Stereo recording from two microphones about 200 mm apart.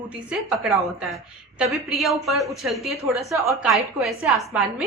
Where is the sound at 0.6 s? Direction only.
Centre (ahead or behind).